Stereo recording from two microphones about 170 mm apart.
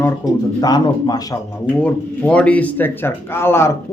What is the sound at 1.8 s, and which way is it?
Speech, 5° left (ahead or behind).